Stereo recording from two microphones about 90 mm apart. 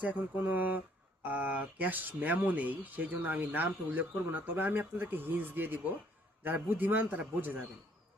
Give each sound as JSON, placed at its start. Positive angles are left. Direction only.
{"t": 0.0, "sound": "speech", "side_deg": -20}